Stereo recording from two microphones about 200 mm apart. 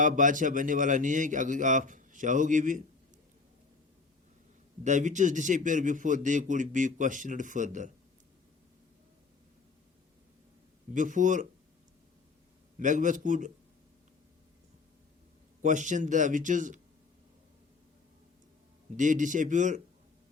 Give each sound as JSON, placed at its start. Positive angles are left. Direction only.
{"t": 0.0, "sound": "a man's voice", "side_deg": -40}
{"t": 4.8, "sound": "a man's voice", "side_deg": -35}
{"t": 10.9, "sound": "a man's voice", "side_deg": -40}
{"t": 12.8, "sound": "a man's voice", "side_deg": -40}
{"t": 15.6, "sound": "a man's voice", "side_deg": -40}
{"t": 18.9, "sound": "a man's voice", "side_deg": -40}